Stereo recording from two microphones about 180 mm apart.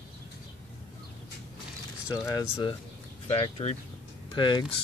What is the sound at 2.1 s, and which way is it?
Speech, 20° left (ahead or behind).